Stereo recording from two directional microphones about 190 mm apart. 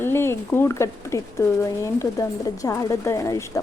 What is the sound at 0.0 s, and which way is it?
Speech, 10° left (ahead or behind).